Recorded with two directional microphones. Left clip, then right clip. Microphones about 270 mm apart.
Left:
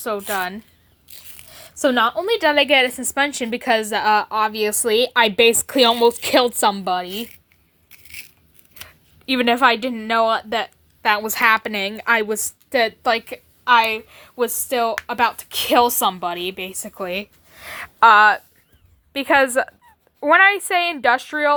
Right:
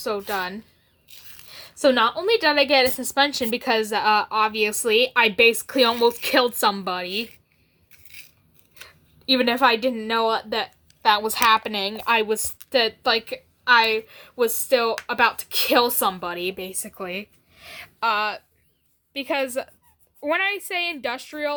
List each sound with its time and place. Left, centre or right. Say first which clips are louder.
0.0 s a woman's voice: left 3 dB; left
7.9 s a sound: left 7 dB; left
9.2 s a woman's voice: left 3 dB; left
16.6 s speech: left 5 dB; centre